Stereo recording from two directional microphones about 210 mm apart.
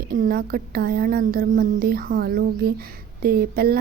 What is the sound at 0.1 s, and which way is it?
Speech, 45° right (ahead or behind).